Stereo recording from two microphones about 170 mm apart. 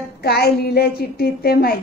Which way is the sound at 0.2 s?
70° left (ahead or behind).